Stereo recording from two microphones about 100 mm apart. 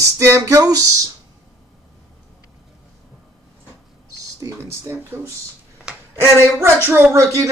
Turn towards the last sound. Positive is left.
turn(degrees=-25)  # may be behind; listen again after turning